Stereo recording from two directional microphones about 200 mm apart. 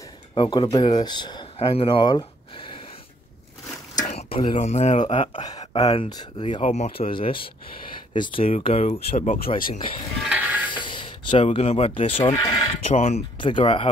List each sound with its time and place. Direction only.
0.3 s speech: 20° left (ahead or behind)
3.9 s a sound: 35° left (ahead or behind)
4.5 s speech: 35° left (ahead or behind)
5.8 s speech: 30° left (ahead or behind)
10.2 s music: 5° right (ahead or behind)
10.7 s speech: 25° left (ahead or behind)
12.8 s speech: 35° left (ahead or behind)